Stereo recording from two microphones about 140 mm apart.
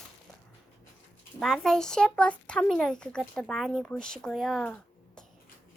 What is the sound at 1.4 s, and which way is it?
Speech, 5° left (ahead or behind).